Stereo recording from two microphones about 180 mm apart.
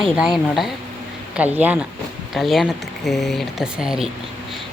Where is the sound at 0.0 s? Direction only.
Centre (ahead or behind).